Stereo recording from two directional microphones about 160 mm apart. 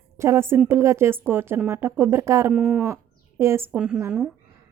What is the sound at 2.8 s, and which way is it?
A woman's voice, 15° right (ahead or behind).